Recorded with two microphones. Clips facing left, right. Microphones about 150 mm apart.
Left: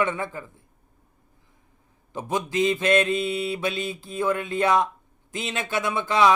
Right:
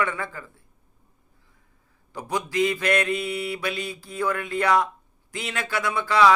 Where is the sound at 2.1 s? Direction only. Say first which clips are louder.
Left 1 dB; 20° left (ahead or behind).